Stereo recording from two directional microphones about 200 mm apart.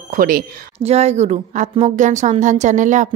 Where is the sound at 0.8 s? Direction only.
35° right (ahead or behind).